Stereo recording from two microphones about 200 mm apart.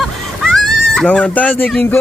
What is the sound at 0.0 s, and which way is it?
Speech, centre (ahead or behind).